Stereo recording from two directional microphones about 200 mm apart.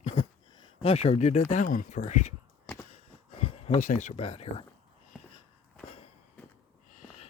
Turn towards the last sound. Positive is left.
turn(degrees=35)  # may be behind; listen again after turning